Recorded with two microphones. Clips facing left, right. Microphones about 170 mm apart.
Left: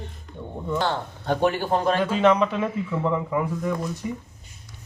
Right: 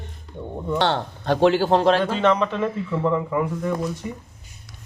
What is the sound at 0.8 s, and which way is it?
Speech, 85° right.